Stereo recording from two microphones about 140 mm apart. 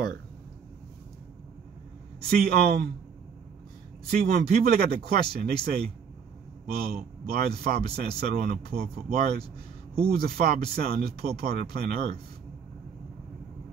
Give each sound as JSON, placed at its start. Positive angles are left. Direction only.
{"t": 2.2, "sound": "speech", "side_deg": -90}
{"t": 4.1, "sound": "speech", "side_deg": -90}
{"t": 10.0, "sound": "speech", "side_deg": -90}